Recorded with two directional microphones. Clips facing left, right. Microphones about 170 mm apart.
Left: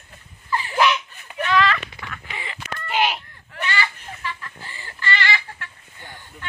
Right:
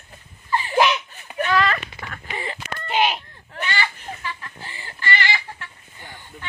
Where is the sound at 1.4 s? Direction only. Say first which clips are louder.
Left 1 dB; 40° right (ahead or behind).